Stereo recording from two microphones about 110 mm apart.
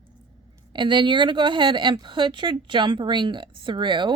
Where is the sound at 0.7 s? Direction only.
45° right (ahead or behind).